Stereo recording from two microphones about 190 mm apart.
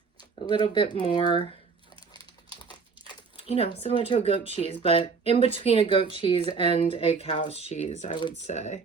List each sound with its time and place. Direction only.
0.2 s speech: 25° left (ahead or behind)
2.1 s crumpling: 25° left (ahead or behind)
5.4 s speech: 30° left (ahead or behind)
8.4 s speech: 35° left (ahead or behind)